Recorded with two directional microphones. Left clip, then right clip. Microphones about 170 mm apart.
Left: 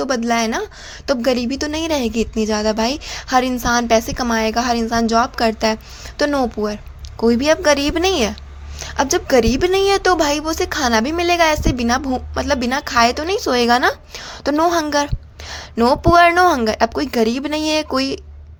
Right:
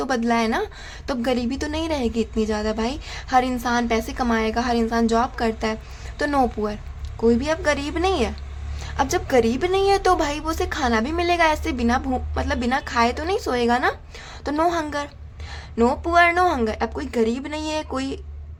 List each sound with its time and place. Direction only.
0.0 s a woman's voice: 15° left (ahead or behind)
6.3 s a woman's voice: 15° left (ahead or behind)
7.2 s a woman's voice: 30° left (ahead or behind)